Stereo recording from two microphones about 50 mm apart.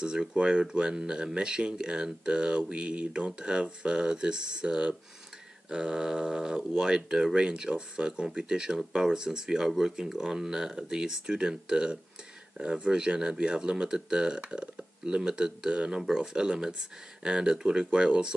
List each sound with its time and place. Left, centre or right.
0.0 s speech: centre